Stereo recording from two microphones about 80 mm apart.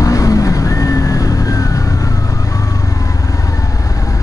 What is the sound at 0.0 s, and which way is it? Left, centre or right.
Vehicle, left.